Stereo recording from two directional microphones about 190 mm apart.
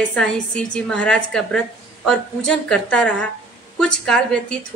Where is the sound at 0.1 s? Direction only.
5° left (ahead or behind).